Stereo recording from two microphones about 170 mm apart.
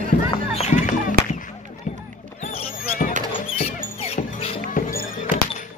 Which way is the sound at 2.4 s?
50° left (ahead or behind).